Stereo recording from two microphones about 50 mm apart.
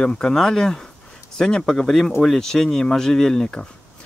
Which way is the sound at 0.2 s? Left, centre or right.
Centre.